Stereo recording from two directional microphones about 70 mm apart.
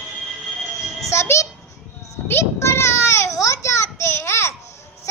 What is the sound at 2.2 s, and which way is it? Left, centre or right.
Children playing, left.